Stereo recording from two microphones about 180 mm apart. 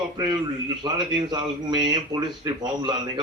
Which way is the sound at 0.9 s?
25° right (ahead or behind).